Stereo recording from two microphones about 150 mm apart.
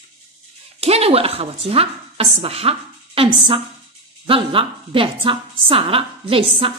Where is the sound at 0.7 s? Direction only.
45° right (ahead or behind).